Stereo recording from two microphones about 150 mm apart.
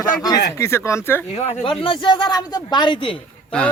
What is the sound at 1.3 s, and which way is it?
Speech, 45° left (ahead or behind).